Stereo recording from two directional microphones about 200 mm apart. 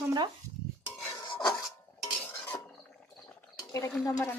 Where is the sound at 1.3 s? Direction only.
20° left (ahead or behind).